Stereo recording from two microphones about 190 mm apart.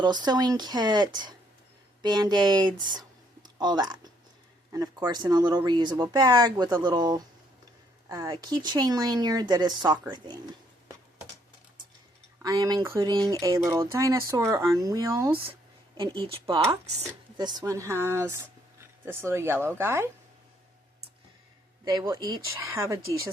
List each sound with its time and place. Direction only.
0.0 s speech: 20° right (ahead or behind)
12.4 s speech: 20° right (ahead or behind)
21.8 s speech: 20° right (ahead or behind)